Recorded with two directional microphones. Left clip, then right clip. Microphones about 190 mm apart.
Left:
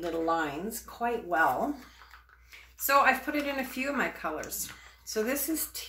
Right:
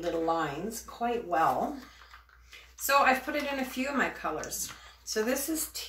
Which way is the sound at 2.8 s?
30° left (ahead or behind).